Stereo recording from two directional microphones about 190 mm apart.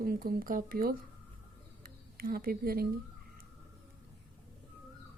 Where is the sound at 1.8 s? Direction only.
50° right (ahead or behind).